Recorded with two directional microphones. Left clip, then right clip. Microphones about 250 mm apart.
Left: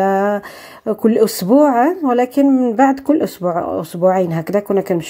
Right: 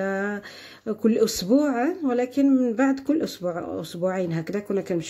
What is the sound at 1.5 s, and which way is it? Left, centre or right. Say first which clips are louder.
Speech: left 10 dB; centre.